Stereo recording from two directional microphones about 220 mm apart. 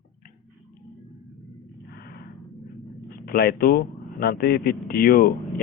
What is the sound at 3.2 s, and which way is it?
A man's voice, 45° left (ahead or behind).